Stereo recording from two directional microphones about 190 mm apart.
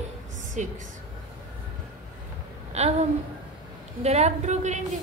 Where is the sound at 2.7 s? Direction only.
35° right (ahead or behind).